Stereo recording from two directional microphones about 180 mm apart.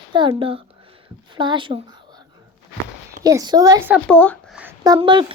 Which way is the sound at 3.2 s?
20° right (ahead or behind).